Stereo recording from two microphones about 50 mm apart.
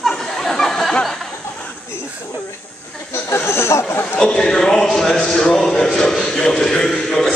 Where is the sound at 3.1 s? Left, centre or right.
Left.